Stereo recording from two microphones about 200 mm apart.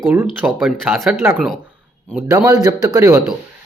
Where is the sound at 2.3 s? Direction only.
20° right (ahead or behind).